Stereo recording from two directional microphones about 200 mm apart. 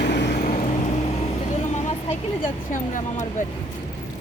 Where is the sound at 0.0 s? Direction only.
55° left (ahead or behind).